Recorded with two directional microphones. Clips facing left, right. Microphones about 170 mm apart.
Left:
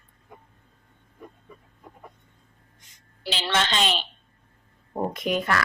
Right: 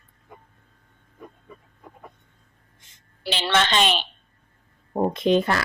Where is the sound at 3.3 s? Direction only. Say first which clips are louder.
Right 3 dB; 65° right (ahead or behind).